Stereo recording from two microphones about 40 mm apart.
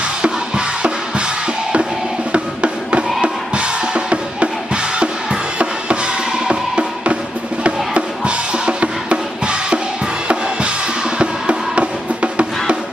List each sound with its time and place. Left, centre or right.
0.0 s drum kit: right
2.3 s music: right
3.5 s drum kit: right
7.6 s drum: right
11.2 s music: right